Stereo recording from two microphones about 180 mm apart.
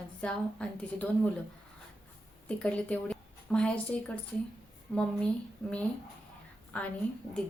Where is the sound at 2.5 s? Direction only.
5° left (ahead or behind).